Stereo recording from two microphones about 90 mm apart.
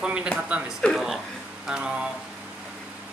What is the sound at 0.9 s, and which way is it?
Speech, centre (ahead or behind).